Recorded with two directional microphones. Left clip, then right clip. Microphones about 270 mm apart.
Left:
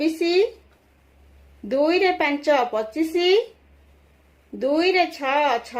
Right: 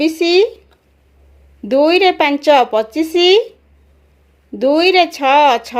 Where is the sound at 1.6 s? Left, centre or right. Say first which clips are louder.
Right 8 dB; right.